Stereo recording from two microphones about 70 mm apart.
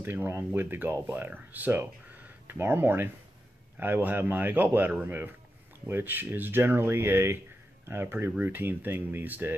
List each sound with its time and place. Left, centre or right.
0.0 s a man's voice: right